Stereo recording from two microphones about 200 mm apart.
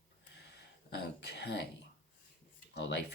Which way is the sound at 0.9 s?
60° left (ahead or behind).